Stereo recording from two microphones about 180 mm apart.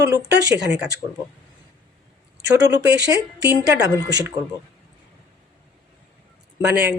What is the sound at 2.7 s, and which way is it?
Speech, 70° right (ahead or behind).